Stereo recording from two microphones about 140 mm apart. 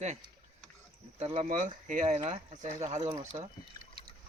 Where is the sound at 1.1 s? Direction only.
55° right (ahead or behind).